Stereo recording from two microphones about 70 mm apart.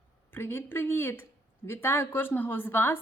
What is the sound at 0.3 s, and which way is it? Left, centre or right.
A woman's voice, left.